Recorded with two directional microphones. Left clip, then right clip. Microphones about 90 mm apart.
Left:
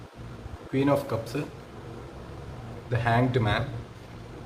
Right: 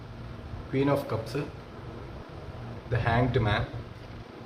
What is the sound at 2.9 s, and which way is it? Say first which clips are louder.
Speech: left 2 dB; 20° left (ahead or behind).